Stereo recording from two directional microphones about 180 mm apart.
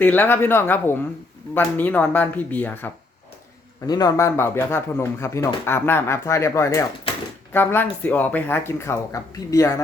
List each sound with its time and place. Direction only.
0.0 s speech: 10° left (ahead or behind)
3.8 s speech: 20° left (ahead or behind)